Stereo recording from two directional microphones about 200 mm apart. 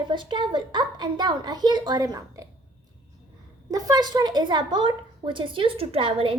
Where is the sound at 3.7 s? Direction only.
20° right (ahead or behind).